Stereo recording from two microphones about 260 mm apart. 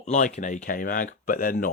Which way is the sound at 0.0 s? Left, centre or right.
Left.